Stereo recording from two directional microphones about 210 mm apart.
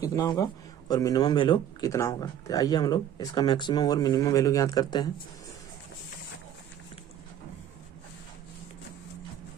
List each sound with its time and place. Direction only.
0.0 s a man's voice: 15° left (ahead or behind)